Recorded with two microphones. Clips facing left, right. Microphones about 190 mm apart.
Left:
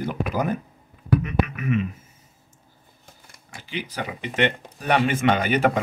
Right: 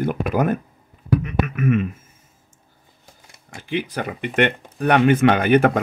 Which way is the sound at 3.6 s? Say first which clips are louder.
Right 6 dB; 50° right (ahead or behind).